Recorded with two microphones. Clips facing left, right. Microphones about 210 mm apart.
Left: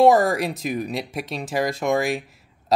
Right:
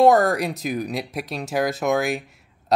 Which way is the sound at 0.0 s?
Centre (ahead or behind).